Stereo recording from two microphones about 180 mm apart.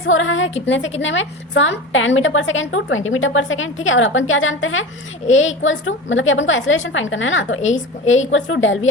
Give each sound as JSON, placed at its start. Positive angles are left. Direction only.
{"t": 0.1, "sound": "a woman's voice", "side_deg": 90}